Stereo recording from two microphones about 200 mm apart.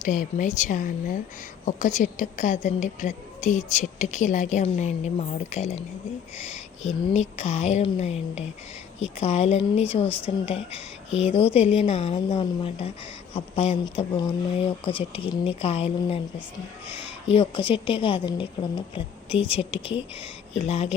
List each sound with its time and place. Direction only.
0.0 s a woman's voice: 40° left (ahead or behind)
6.8 s a woman's voice: 35° left (ahead or behind)
17.2 s a woman's voice: 25° left (ahead or behind)